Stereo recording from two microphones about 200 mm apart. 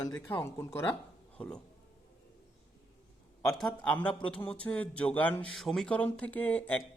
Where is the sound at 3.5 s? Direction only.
Centre (ahead or behind).